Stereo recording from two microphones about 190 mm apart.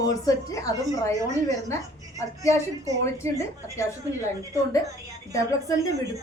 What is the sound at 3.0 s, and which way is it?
A woman's voice, 15° left (ahead or behind).